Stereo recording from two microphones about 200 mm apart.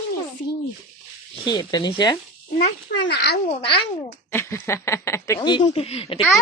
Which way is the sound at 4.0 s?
10° left (ahead or behind).